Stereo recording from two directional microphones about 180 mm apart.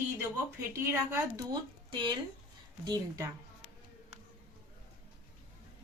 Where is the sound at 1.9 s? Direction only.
25° right (ahead or behind).